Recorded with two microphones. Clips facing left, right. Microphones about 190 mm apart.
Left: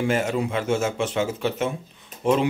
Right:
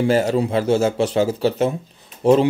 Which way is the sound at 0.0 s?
35° right (ahead or behind).